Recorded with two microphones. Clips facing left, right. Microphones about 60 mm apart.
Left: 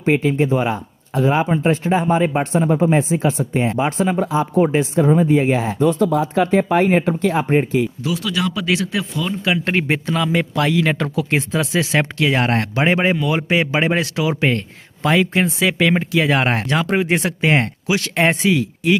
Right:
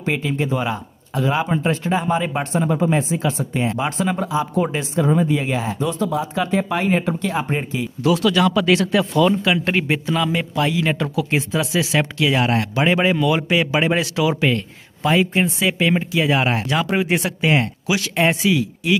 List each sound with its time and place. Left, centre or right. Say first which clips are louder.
0.0 s speech: left 5 dB; left
5.8 s speech: left 5 dB; left
8.0 s speech: right 5 dB; centre
9.7 s speech: left 1 dB; left
10.5 s speech: left 2 dB; left
15.0 s speech: left 1 dB; left
16.1 s speech: left 2 dB; left